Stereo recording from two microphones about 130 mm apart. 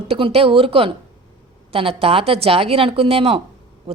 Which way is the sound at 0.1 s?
50° right (ahead or behind).